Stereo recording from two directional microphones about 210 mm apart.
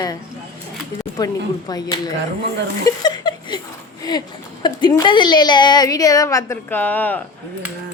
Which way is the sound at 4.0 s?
20° left (ahead or behind).